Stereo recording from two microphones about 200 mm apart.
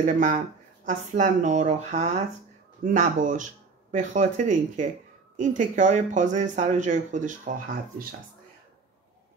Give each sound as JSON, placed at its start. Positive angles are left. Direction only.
{"t": 0.0, "sound": "speech", "side_deg": -40}